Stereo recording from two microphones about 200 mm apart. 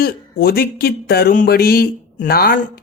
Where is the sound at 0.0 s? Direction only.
50° left (ahead or behind).